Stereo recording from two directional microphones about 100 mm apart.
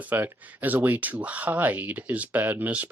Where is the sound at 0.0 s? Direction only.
15° right (ahead or behind).